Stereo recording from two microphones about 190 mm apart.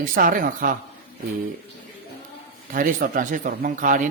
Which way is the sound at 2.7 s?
45° right (ahead or behind).